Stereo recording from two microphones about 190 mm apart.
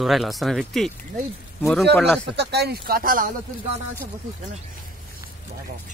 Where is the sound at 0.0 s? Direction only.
Centre (ahead or behind).